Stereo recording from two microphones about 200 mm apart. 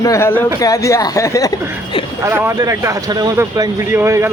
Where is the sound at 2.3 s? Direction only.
15° right (ahead or behind).